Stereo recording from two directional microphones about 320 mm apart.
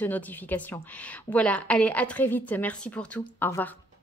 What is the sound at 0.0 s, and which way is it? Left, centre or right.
A woman's voice, centre.